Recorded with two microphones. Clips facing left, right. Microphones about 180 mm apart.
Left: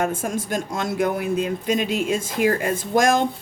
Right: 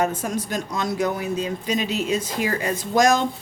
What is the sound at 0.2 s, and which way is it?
A woman's voice, 50° left (ahead or behind).